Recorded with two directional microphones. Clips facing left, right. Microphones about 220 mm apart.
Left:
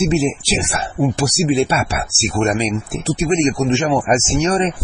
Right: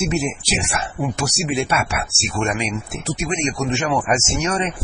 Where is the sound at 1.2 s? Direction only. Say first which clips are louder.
Left 6 dB; 35° left (ahead or behind).